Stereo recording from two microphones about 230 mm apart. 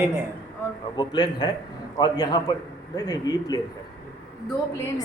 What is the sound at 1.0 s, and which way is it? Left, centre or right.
A man's voice, centre.